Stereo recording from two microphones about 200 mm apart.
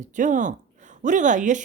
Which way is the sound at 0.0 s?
40° right (ahead or behind).